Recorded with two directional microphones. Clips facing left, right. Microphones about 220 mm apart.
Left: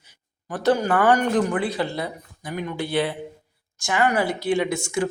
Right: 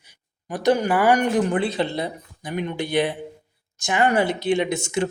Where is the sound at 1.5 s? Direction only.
25° right (ahead or behind).